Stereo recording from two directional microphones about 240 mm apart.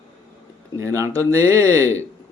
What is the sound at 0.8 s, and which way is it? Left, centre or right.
Speech, centre.